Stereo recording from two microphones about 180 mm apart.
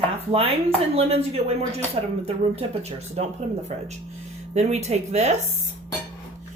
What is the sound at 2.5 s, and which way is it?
Speech, 35° right (ahead or behind).